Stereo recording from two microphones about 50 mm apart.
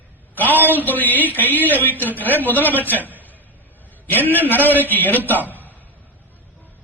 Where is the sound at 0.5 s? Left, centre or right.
Right.